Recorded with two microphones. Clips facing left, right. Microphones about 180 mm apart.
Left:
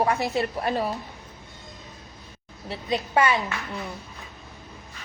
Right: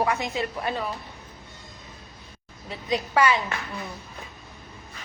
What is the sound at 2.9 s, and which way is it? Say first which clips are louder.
Speech: even; 25° left (ahead or behind).